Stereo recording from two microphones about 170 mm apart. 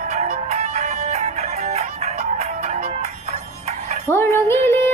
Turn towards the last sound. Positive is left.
turn(degrees=15)  # may be behind; listen again after turning